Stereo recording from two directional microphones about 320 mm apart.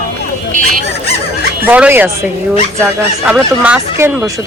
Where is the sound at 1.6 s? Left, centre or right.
Centre.